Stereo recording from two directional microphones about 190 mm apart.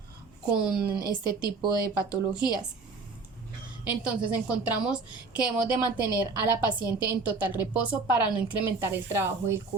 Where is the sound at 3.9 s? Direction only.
5° right (ahead or behind).